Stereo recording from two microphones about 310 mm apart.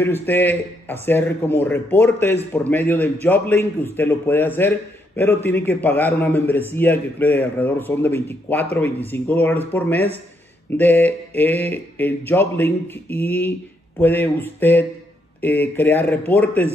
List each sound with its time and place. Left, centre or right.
0.0 s a man's voice: centre